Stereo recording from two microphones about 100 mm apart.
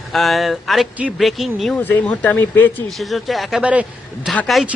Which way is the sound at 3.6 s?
10° right (ahead or behind).